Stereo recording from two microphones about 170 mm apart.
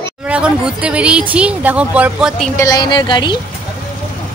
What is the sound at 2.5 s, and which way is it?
Speech, 20° left (ahead or behind).